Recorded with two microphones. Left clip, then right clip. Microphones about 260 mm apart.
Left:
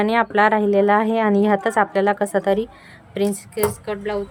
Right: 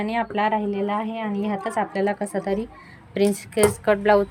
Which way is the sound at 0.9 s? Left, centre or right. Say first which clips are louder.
Left 9 dB; left.